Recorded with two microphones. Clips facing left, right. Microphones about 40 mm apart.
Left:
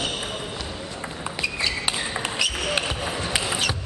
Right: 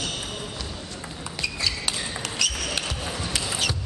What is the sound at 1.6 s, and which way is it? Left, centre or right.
Basketball bounce, centre.